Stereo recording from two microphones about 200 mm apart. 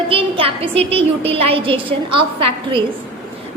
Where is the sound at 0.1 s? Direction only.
25° right (ahead or behind).